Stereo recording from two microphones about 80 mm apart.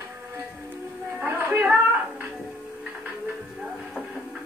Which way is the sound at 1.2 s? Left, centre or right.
Right.